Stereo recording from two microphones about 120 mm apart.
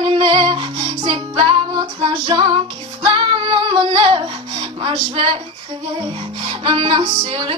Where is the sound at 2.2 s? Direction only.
45° right (ahead or behind).